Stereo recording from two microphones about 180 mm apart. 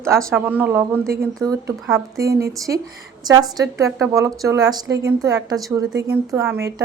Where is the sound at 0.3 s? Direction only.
10° right (ahead or behind).